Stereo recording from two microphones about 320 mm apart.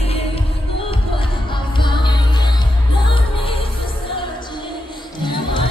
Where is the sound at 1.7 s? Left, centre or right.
Centre.